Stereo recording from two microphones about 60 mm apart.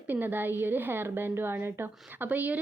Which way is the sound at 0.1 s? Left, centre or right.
Right.